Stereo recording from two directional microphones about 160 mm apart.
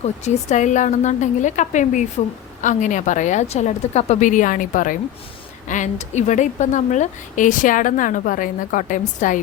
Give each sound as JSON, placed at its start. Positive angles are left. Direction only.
{"t": 0.0, "sound": "a woman's voice", "side_deg": 45}